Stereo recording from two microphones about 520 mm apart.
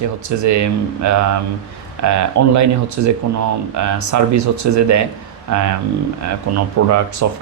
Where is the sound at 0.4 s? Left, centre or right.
Right.